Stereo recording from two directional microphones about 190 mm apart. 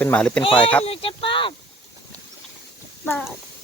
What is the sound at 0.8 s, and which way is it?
Speech, 30° left (ahead or behind).